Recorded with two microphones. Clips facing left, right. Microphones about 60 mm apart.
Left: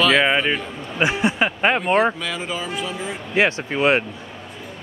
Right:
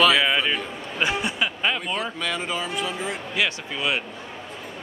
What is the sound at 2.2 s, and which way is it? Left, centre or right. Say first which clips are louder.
Speech: even; centre.